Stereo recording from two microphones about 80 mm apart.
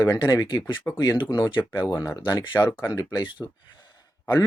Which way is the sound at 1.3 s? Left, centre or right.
Left.